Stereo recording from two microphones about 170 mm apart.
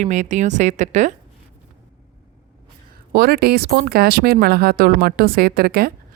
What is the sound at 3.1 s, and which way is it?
Speech, 65° right (ahead or behind).